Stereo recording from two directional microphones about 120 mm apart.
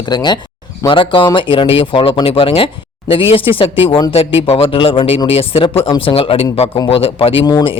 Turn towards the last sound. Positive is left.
turn(degrees=50)  # may be behind; listen again after turning